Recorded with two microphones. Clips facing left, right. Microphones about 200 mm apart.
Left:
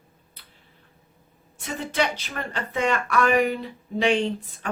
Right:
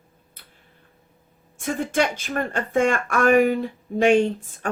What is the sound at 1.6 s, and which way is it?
Speech, 50° right (ahead or behind).